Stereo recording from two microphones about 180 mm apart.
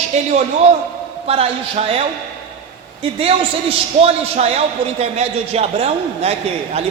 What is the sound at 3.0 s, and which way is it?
A man's voice, 35° right (ahead or behind).